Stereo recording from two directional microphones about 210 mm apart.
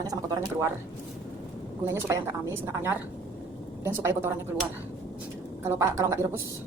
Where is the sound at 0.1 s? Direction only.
15° right (ahead or behind).